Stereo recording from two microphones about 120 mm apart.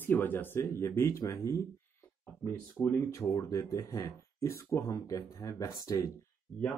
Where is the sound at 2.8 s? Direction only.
20° left (ahead or behind).